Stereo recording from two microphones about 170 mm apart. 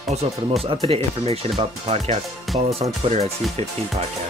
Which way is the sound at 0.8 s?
35° right (ahead or behind).